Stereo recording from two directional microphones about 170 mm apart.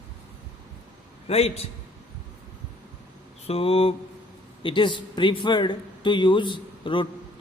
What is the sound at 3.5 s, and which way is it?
A man's voice, 35° left (ahead or behind).